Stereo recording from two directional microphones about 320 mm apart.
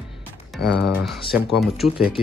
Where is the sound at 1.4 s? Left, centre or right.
Centre.